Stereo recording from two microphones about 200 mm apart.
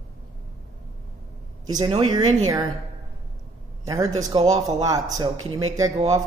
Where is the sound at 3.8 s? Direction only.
15° right (ahead or behind).